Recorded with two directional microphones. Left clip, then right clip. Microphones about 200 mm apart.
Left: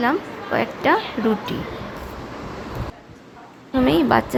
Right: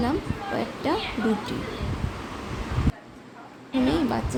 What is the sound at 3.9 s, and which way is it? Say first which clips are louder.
Speech: left 10 dB; 20° left (ahead or behind).